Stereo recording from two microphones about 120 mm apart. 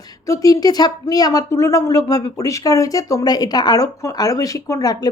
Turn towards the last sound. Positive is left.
turn(degrees=30)  # may be behind; listen again after turning